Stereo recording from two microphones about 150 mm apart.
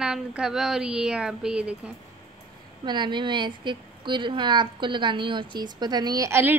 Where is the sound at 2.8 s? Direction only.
30° right (ahead or behind).